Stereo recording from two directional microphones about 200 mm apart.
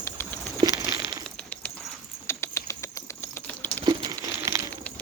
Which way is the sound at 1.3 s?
5° left (ahead or behind).